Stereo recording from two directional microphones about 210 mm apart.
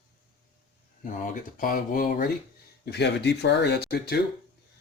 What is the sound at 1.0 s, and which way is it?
Speech, 40° left (ahead or behind).